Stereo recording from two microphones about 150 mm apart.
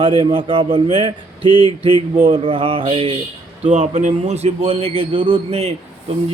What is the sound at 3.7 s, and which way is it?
A man's voice, 55° right (ahead or behind).